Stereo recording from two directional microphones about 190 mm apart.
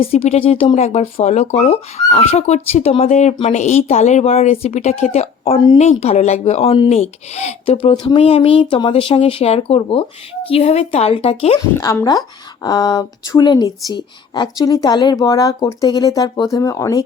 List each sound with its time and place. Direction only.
0.0 s speech: 30° left (ahead or behind)
11.8 s speech: 15° left (ahead or behind)